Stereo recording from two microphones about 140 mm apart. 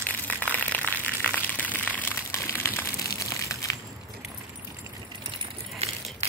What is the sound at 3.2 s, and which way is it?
Crumpling, 25° left (ahead or behind).